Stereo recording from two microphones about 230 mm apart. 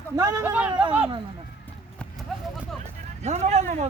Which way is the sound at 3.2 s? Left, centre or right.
Right.